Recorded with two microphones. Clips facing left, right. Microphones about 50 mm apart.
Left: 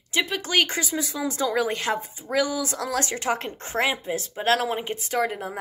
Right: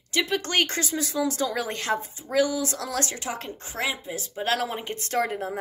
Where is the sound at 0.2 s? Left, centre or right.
Centre; by 4.5 s left.